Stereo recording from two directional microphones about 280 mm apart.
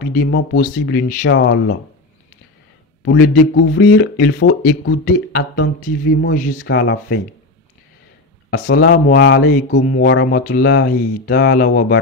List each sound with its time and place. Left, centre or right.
0.1 s speech: left
3.1 s speech: left
8.5 s speech: left